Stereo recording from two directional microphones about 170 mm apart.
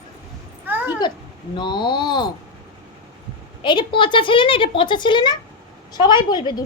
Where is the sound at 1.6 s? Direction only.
25° left (ahead or behind).